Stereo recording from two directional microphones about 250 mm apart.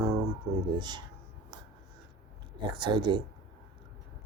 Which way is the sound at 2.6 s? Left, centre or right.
Centre.